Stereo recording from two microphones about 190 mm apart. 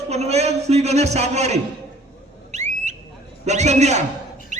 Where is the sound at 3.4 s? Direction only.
35° right (ahead or behind).